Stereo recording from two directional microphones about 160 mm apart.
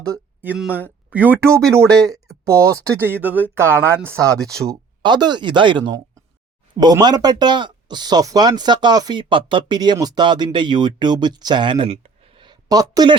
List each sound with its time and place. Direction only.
0.4 s speech: 5° right (ahead or behind)
1.5 s speech: 5° left (ahead or behind)
2.2 s a sound: 5° left (ahead or behind)
2.5 s speech: 20° right (ahead or behind)
4.7 s speech: 25° right (ahead or behind)